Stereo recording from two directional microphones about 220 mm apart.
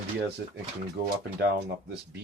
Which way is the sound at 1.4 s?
50° right (ahead or behind).